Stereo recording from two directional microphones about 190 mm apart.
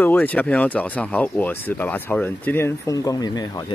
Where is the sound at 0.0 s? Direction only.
10° left (ahead or behind).